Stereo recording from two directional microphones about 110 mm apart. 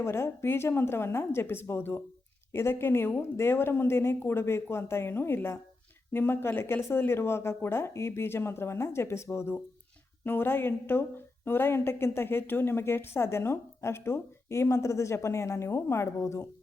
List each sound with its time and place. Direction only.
0.0 s a woman's voice: 25° left (ahead or behind)